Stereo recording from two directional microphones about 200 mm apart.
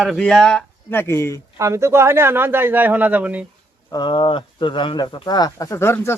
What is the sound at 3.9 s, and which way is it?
Speech, 20° left (ahead or behind).